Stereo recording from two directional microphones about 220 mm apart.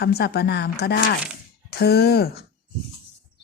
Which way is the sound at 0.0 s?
45° left (ahead or behind).